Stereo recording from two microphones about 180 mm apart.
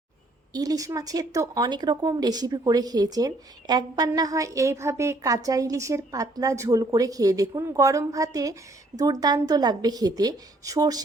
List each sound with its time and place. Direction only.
0.5 s speech: 20° right (ahead or behind)